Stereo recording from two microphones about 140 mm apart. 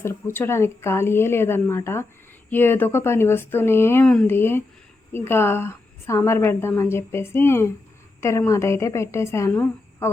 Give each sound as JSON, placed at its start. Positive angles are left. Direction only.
{"t": 0.0, "sound": "a woman's voice", "side_deg": 20}